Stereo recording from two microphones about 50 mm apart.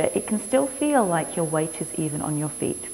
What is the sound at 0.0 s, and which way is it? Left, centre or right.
Speech, centre.